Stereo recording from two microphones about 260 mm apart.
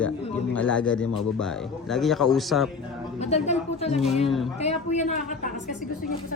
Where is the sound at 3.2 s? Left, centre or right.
Left.